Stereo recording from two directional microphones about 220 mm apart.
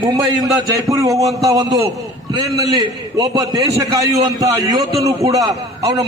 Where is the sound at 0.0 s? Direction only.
20° right (ahead or behind).